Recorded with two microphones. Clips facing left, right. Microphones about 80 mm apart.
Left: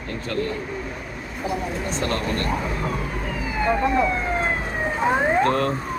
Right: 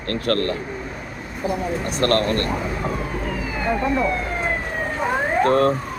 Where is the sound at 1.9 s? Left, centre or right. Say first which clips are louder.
Right 7 dB; right.